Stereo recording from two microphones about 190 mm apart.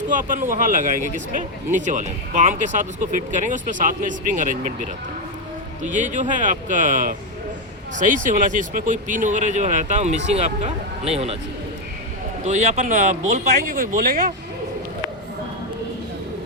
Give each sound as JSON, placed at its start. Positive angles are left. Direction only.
{"t": 0.1, "sound": "speech", "side_deg": -45}
{"t": 12.5, "sound": "speech", "side_deg": -40}